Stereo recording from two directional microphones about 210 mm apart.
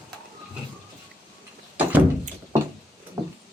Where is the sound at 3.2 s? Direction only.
15° right (ahead or behind).